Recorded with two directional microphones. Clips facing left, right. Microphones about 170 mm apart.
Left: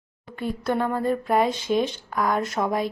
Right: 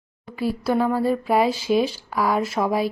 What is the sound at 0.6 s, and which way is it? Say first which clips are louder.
Speech: right 3 dB; 5° right (ahead or behind).